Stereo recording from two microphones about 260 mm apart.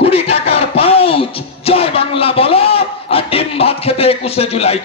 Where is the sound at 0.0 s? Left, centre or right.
Left.